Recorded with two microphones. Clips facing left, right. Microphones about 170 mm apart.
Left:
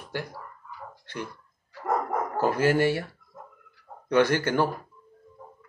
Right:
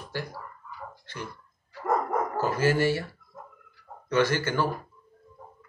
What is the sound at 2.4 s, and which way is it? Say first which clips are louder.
Speech: left 3 dB; 55° left (ahead or behind).